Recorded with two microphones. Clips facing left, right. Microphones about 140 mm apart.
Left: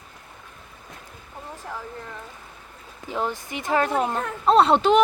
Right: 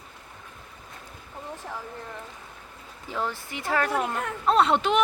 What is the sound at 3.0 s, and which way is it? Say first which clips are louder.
Speech: left 3 dB; 15° left (ahead or behind).